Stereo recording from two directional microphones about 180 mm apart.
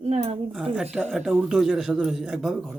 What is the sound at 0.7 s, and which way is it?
Speech, 5° right (ahead or behind).